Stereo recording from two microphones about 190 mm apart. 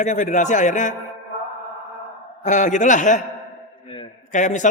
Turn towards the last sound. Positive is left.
turn(degrees=40)  # may be behind; listen again after turning